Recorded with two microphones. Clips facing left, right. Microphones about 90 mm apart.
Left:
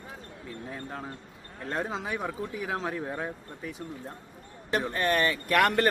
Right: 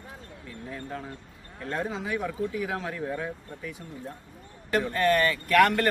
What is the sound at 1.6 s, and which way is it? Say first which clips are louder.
Speech: right 1 dB; 25° left (ahead or behind).